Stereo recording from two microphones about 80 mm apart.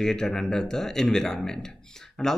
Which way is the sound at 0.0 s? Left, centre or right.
Centre.